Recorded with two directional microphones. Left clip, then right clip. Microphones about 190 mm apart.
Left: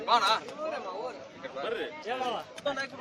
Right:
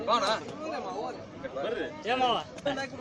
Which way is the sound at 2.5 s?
10° left (ahead or behind).